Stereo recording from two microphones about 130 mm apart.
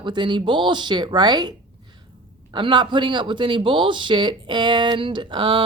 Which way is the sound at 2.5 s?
40° right (ahead or behind).